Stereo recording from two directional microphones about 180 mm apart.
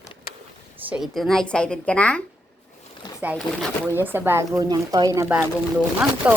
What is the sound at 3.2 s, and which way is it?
Speech, 5° right (ahead or behind).